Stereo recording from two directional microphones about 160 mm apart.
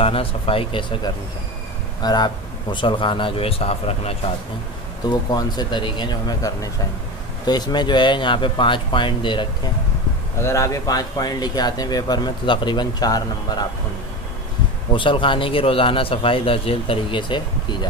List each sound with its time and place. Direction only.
0.0 s a man's voice: 35° left (ahead or behind)
5.0 s speech: 25° left (ahead or behind)
10.4 s speech: 20° left (ahead or behind)
14.9 s a man's voice: 30° left (ahead or behind)